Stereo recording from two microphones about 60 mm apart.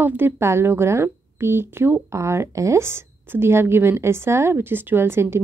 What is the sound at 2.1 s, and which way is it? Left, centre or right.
A woman's voice, right.